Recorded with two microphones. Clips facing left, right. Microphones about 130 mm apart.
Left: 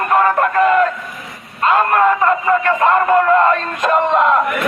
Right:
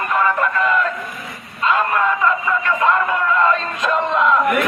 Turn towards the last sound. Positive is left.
turn(degrees=60)  # may be behind; listen again after turning